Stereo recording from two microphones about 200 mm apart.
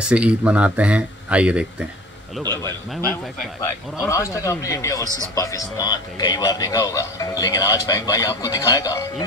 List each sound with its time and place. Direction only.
0.1 s speech: 5° right (ahead or behind)
2.5 s a man's voice: 10° left (ahead or behind)
4.1 s a man's voice: 15° left (ahead or behind)